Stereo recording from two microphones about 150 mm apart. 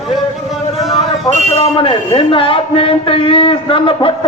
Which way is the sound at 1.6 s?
35° left (ahead or behind).